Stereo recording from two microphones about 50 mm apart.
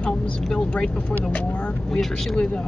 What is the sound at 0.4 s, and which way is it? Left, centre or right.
Speech, centre.